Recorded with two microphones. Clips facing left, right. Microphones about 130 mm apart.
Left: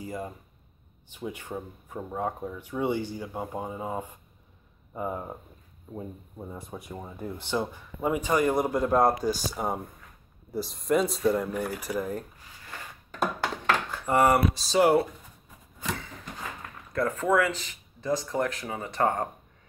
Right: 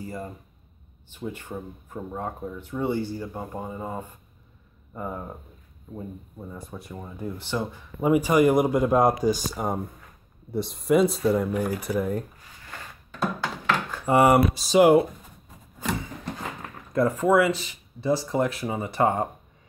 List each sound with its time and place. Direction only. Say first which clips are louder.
0.0 s speech: even; 15° left (ahead or behind)
6.9 s speech: right 3 dB; 5° left (ahead or behind)
7.3 s speech: left 1 dB; 15° left (ahead or behind)
8.0 s speech: right 6 dB; 10° right (ahead or behind)
9.5 s speech: right 2 dB; centre (ahead or behind)
14.0 s speech: right 4 dB; 15° right (ahead or behind)
16.9 s speech: right 4 dB; 15° right (ahead or behind)